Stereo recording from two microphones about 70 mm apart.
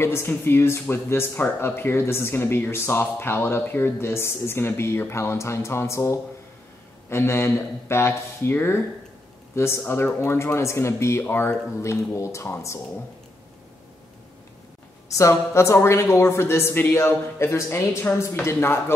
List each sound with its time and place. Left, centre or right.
0.0 s speech: left
15.0 s speech: left